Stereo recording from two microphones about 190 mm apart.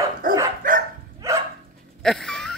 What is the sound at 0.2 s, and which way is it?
Dog, 45° right (ahead or behind).